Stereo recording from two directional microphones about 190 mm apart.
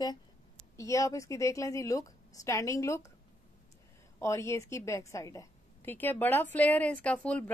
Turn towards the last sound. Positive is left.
turn(degrees=5)  # may be behind; listen again after turning